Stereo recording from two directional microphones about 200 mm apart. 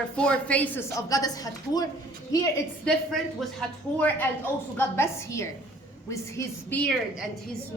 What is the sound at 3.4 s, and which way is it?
A woman's voice, 5° left (ahead or behind).